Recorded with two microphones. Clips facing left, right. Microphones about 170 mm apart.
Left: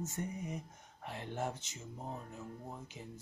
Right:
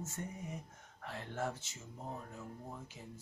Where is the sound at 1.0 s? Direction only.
20° left (ahead or behind).